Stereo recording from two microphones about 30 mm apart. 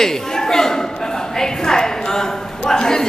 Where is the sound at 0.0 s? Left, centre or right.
Centre.